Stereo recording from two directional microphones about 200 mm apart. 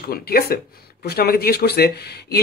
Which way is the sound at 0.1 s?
50° left (ahead or behind).